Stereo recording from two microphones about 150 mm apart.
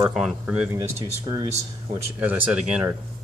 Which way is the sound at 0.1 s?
5° right (ahead or behind).